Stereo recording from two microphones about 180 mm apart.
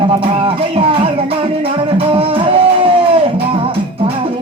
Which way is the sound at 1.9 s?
30° right (ahead or behind).